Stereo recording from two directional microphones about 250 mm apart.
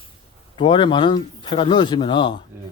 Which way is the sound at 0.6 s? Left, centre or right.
Centre.